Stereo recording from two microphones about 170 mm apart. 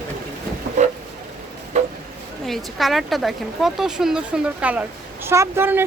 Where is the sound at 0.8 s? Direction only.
45° right (ahead or behind).